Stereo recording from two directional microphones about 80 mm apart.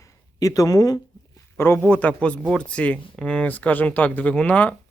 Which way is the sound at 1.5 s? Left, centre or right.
Left.